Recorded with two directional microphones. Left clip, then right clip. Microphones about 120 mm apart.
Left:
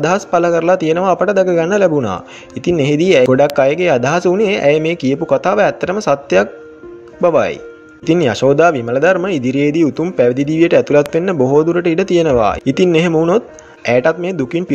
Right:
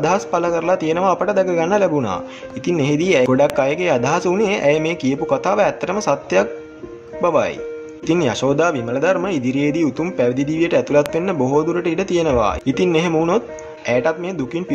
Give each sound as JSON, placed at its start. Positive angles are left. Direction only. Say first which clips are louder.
{"t": 0.0, "sound": "speech", "louder": "left 4 dB", "side_deg": 40}